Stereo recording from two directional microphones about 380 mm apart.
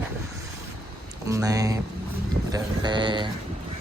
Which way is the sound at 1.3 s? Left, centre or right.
Centre.